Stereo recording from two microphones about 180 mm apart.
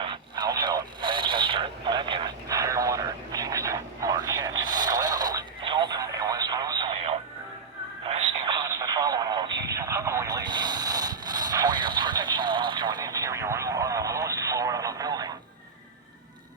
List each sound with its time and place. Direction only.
0.0 s radio: 25° right (ahead or behind)